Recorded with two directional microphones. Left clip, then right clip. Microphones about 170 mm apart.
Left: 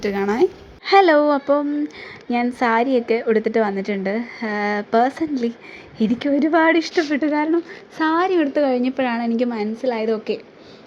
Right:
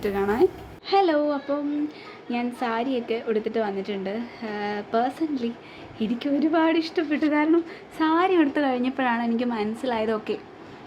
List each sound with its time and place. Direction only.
0.0 s a woman's voice: 30° left (ahead or behind)
0.9 s a woman's voice: 45° left (ahead or behind); by 7.5 s 20° left (ahead or behind)
7.9 s a woman's voice: 35° left (ahead or behind)